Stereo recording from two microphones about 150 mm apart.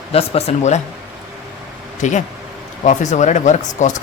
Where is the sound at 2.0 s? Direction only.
55° left (ahead or behind).